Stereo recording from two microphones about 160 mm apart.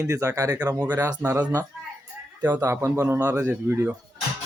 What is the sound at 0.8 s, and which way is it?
A man's voice, 10° right (ahead or behind).